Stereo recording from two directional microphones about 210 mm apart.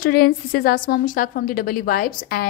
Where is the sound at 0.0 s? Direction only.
45° left (ahead or behind).